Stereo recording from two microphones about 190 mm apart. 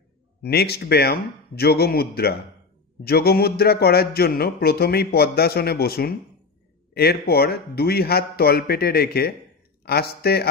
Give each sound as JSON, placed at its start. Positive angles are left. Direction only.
{"t": 0.4, "sound": "speech", "side_deg": 55}